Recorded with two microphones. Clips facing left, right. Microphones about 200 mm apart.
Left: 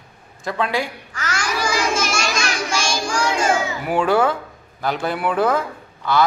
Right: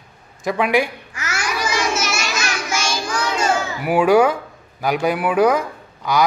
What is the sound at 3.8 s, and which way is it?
A man's voice, 10° right (ahead or behind).